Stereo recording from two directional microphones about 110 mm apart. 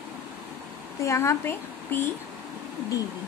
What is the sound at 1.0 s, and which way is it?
A woman's voice, 25° left (ahead or behind).